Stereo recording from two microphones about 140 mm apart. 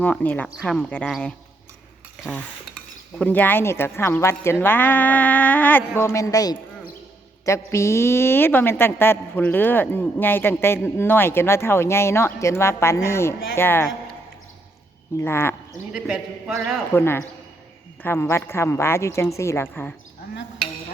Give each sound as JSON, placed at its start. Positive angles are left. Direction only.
{"t": 0.0, "sound": "a woman's voice", "side_deg": 10}
{"t": 3.2, "sound": "a woman's voice", "side_deg": 10}
{"t": 4.6, "sound": "a sound", "side_deg": 15}
{"t": 6.0, "sound": "a woman's voice", "side_deg": 20}
{"t": 15.2, "sound": "a woman's voice", "side_deg": 15}
{"t": 15.9, "sound": "a man's voice", "side_deg": -5}
{"t": 16.9, "sound": "a woman's voice", "side_deg": 15}